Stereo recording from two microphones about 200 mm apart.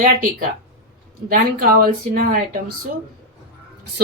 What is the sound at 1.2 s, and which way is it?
Speech, 45° right (ahead or behind).